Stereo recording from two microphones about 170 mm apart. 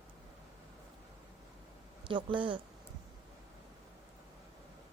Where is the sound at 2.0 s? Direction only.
30° right (ahead or behind).